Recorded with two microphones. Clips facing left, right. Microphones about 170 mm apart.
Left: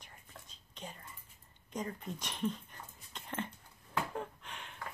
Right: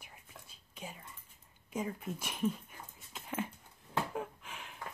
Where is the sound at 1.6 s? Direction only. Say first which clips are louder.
Right 2 dB; 5° right (ahead or behind).